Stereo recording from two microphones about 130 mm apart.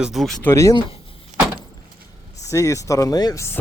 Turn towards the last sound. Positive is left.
turn(degrees=25)  # may be behind; listen again after turning